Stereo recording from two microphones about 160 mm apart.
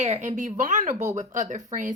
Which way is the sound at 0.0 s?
45° right (ahead or behind).